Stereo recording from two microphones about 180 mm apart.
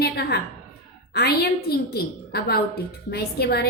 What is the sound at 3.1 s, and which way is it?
Speech, 60° left (ahead or behind).